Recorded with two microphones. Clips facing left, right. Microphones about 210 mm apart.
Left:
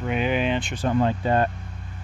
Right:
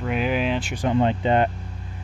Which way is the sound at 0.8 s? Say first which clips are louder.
Right 2 dB; 20° right (ahead or behind).